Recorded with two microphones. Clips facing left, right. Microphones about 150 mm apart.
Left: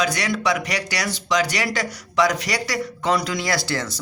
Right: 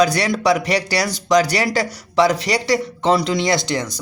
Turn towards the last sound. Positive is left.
turn(degrees=-15)  # may be behind; listen again after turning